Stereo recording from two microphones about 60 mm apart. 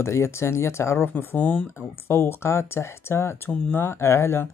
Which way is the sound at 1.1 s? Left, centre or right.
Left.